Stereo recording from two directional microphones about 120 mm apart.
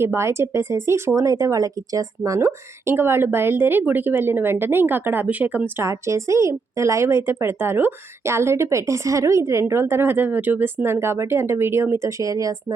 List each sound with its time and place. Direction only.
0.0 s speech: 20° right (ahead or behind)